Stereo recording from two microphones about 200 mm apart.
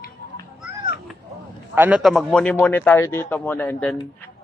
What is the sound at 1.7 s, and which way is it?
Speech, 10° right (ahead or behind).